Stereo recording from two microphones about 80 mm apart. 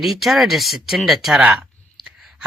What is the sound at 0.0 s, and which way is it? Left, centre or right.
Speech, centre.